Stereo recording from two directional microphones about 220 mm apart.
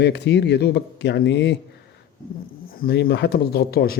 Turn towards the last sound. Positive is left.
turn(degrees=45)  # may be behind; listen again after turning